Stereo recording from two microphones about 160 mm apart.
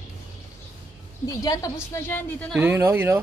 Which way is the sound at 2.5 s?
10° right (ahead or behind).